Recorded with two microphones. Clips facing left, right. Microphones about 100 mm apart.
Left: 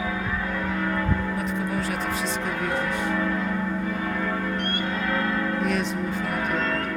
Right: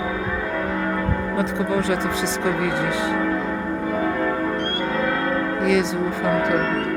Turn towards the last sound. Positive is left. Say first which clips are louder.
# right 6 dB
turn(degrees=-90)